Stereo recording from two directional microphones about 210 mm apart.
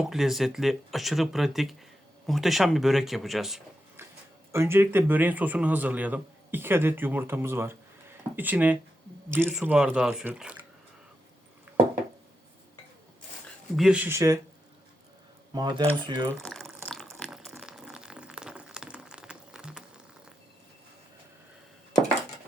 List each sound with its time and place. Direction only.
0.0 s speech: centre (ahead or behind)
4.5 s a man's voice: 10° right (ahead or behind)
13.7 s a man's voice: 5° right (ahead or behind)
15.5 s speech: 20° right (ahead or behind)
16.3 s water: 5° left (ahead or behind)